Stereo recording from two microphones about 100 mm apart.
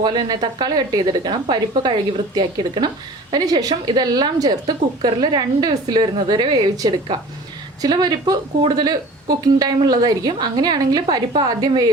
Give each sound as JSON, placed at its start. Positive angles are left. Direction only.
{"t": 0.0, "sound": "a woman's voice", "side_deg": -50}
{"t": 3.3, "sound": "a woman's voice", "side_deg": -40}